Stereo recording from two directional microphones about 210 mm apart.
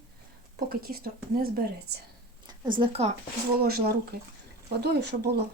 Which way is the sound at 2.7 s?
25° right (ahead or behind).